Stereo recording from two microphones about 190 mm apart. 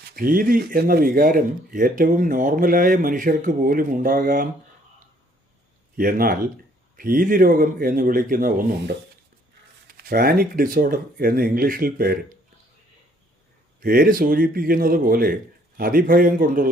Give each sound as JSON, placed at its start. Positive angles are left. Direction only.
{"t": 0.2, "sound": "speech", "side_deg": -50}
{"t": 6.0, "sound": "speech", "side_deg": -50}
{"t": 13.8, "sound": "speech", "side_deg": -50}